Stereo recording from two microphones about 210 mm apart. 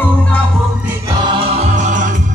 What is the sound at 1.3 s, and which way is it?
Music, 25° right (ahead or behind).